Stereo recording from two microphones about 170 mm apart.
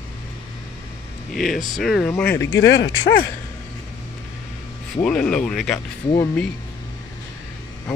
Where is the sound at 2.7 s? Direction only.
90° left.